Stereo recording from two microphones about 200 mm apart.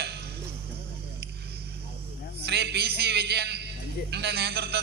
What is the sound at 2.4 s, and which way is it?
Music, 55° right (ahead or behind).